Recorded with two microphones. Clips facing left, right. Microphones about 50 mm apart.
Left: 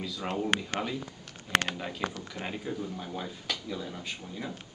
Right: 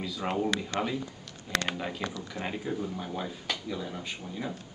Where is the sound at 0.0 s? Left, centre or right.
Centre.